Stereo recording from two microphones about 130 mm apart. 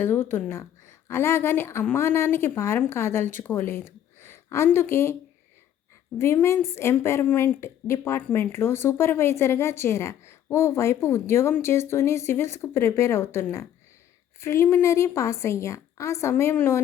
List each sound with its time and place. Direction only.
0.0 s a woman's voice: 15° left (ahead or behind)
6.1 s a woman's voice: 20° left (ahead or behind)